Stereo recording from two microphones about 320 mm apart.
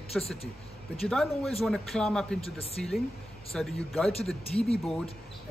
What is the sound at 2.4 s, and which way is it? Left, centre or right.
Speech, centre.